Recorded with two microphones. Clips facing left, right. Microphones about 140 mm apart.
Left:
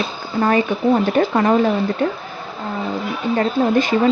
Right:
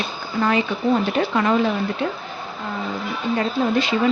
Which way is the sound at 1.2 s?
35° left (ahead or behind).